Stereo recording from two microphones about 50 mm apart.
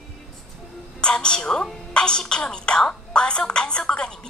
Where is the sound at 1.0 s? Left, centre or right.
Centre.